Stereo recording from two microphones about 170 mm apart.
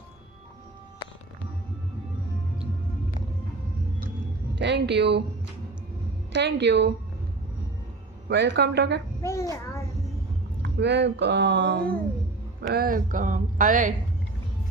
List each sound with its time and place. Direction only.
4.5 s speech: 90° right
6.3 s speech: 90° right
8.3 s speech: 90° right
9.2 s a child's voice: 20° left (ahead or behind)
10.6 s speech: 90° right
12.7 s speech: 55° right (ahead or behind)